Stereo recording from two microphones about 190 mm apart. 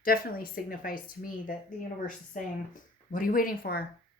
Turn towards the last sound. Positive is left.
turn(degrees=50)  # may be behind; listen again after turning